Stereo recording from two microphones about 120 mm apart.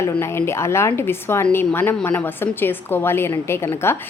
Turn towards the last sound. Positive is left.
turn(degrees=20)  # may be behind; listen again after turning